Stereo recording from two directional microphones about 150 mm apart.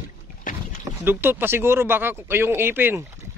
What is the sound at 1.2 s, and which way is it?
Speech, 15° right (ahead or behind).